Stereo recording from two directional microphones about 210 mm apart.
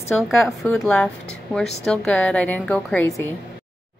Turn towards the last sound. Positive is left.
turn(degrees=10)  # may be behind; listen again after turning